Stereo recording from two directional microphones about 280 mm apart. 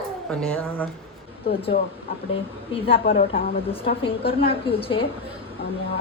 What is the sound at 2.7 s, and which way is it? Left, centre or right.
Speech, centre.